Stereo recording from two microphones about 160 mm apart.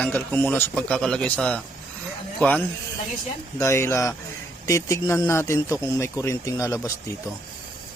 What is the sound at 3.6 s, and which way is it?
Speech, 15° left (ahead or behind).